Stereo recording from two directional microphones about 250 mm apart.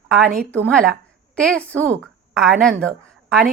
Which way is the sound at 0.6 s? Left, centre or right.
Centre.